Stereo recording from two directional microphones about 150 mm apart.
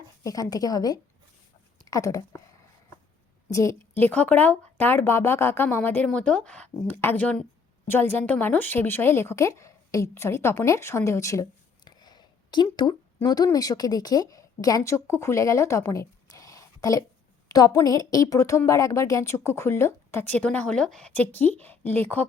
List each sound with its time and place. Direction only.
0.2 s a woman's voice: 25° left (ahead or behind)
3.5 s a woman's voice: 20° left (ahead or behind)
11.9 s a sound: 30° left (ahead or behind)
12.7 s a woman's voice: 30° left (ahead or behind); by 22.3 s 10° left (ahead or behind)